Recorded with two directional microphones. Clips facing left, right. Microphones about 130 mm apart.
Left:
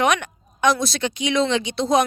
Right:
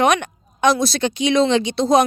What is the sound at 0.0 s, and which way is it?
Speech, 35° right (ahead or behind).